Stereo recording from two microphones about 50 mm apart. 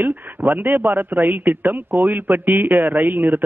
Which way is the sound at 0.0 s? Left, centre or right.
Right.